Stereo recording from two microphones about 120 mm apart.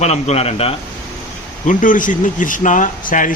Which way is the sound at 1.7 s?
90° left.